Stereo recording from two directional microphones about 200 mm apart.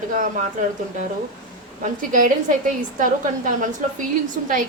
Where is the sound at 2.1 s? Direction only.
40° right (ahead or behind).